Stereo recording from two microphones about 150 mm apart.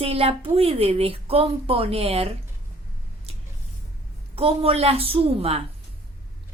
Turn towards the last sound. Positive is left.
turn(degrees=-40)  # may be behind; listen again after turning